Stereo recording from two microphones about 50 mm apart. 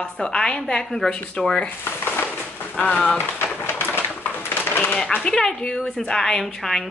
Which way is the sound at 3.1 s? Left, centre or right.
Left.